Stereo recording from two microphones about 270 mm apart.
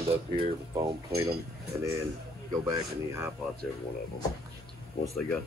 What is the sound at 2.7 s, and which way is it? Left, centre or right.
Speech, centre.